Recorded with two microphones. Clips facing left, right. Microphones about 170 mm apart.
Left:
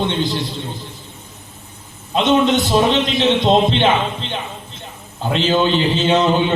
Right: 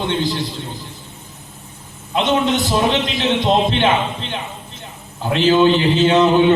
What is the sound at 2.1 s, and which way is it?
Mantra, 20° left (ahead or behind).